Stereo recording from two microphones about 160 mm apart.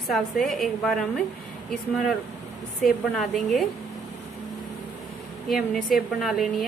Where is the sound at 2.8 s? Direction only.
Centre (ahead or behind).